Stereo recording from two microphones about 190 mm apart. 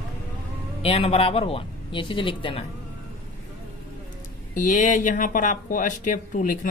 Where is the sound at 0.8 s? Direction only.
30° left (ahead or behind).